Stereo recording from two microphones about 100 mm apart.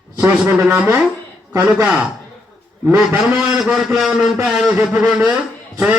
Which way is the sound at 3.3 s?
5° right (ahead or behind).